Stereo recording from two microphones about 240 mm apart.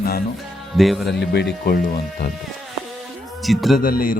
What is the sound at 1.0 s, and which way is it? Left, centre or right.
Speech, left.